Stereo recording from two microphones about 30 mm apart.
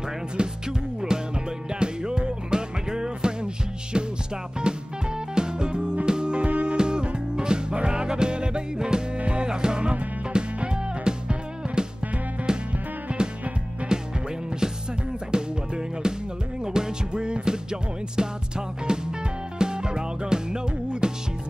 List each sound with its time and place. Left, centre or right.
0.4 s music: right
9.2 s music: right
9.5 s music: right
13.1 s music: right
13.9 s music: right
15.3 s music: right
17.1 s music: right